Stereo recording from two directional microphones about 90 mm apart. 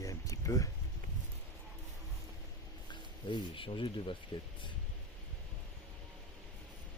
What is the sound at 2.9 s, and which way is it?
Speech, 70° left (ahead or behind).